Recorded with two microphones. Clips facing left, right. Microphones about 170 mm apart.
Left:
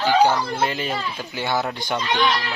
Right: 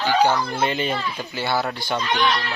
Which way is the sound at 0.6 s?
Centre (ahead or behind).